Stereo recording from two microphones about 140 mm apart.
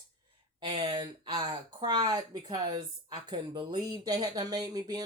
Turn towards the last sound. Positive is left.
turn(degrees=-30)  # may be behind; listen again after turning